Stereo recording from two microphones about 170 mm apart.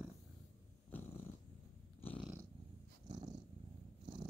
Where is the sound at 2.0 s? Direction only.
10° left (ahead or behind).